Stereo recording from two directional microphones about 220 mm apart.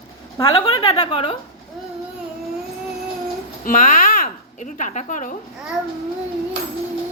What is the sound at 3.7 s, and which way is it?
Speech, 40° left (ahead or behind).